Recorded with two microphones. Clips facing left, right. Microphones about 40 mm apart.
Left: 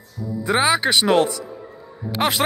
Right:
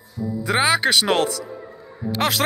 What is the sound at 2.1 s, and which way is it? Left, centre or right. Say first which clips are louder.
Speech: left 1 dB; centre.